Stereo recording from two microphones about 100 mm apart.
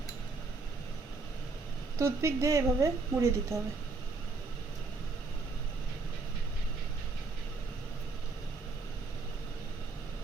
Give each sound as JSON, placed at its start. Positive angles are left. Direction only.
{"t": 2.0, "sound": "a woman's voice", "side_deg": -30}